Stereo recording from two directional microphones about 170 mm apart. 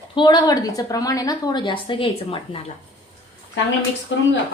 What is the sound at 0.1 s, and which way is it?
A woman's voice, 25° left (ahead or behind).